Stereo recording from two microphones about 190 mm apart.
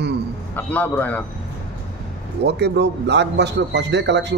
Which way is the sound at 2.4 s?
60° right (ahead or behind).